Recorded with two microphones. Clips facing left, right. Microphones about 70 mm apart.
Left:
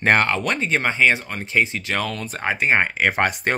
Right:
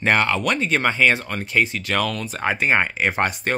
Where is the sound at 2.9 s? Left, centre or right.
Left.